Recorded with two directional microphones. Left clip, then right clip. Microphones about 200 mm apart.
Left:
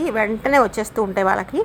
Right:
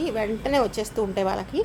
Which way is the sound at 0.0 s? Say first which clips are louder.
Left 6 dB; 20° left (ahead or behind).